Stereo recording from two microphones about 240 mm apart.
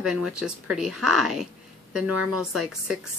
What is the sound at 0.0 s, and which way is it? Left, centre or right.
Speech, centre.